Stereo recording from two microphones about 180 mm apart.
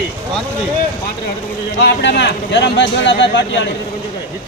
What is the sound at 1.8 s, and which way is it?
Speech, 75° left (ahead or behind).